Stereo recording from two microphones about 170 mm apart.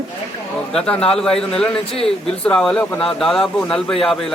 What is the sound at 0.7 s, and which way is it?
Speech, 5° left (ahead or behind).